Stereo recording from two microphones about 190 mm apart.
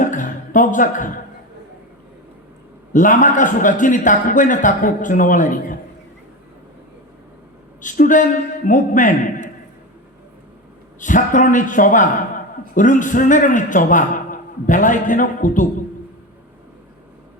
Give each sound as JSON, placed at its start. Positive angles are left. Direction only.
{"t": 0.0, "sound": "music", "side_deg": 45}
{"t": 2.9, "sound": "a man's voice", "side_deg": 40}
{"t": 7.8, "sound": "a man's voice", "side_deg": 45}
{"t": 11.0, "sound": "a man's voice", "side_deg": 45}